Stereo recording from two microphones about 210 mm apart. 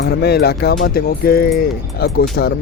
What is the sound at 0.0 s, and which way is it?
Speech, 50° left (ahead or behind).